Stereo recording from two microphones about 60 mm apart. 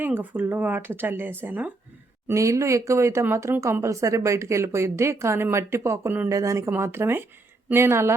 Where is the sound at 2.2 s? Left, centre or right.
Right.